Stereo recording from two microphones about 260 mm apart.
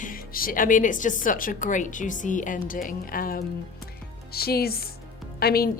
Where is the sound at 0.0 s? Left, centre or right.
Left.